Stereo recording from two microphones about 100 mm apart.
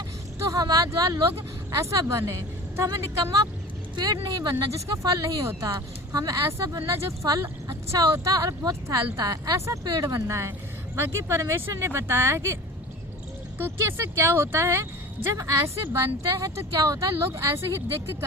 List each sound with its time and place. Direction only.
0.5 s speech: 35° right (ahead or behind)
5.1 s speech: 30° right (ahead or behind)
9.8 s speech: 45° right (ahead or behind); by 12.5 s 25° right (ahead or behind)
13.6 s speech: 25° right (ahead or behind)